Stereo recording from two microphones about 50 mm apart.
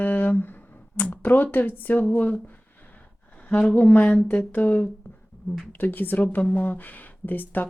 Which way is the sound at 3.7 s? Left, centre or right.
Left.